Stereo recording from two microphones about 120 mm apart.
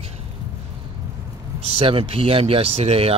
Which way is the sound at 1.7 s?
55° right (ahead or behind).